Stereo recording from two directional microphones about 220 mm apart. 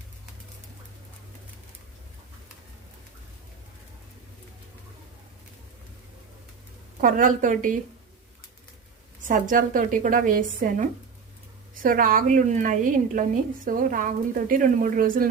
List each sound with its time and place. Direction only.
7.0 s a woman's voice: 35° right (ahead or behind)
9.2 s a woman's voice: 35° right (ahead or behind)